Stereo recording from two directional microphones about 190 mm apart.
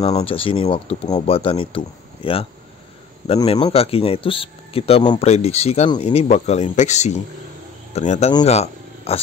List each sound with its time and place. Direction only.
0.1 s speech: 30° left (ahead or behind)
3.4 s speech: 30° left (ahead or behind)
8.5 s purr: 35° left (ahead or behind)